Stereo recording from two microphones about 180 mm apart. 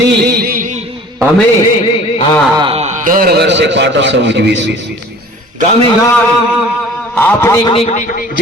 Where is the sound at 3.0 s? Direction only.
55° right (ahead or behind); by 4.9 s 80° right.